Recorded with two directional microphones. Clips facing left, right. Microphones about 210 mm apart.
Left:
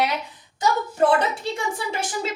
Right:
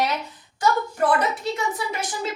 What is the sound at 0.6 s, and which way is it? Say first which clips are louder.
A woman's voice: left 1 dB; 25° left (ahead or behind).